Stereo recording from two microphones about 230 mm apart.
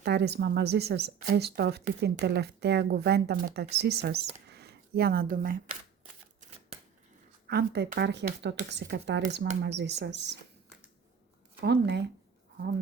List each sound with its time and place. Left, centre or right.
0.0 s speech: right
7.4 s speech: right
11.6 s speech: right